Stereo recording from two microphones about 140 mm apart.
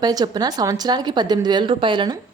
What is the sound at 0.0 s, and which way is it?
A woman's voice, 30° right (ahead or behind).